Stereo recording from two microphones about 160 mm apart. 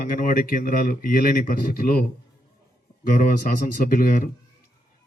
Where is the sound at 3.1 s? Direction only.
60° left (ahead or behind).